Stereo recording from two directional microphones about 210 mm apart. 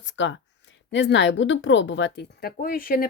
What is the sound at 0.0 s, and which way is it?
Speech, 60° left (ahead or behind).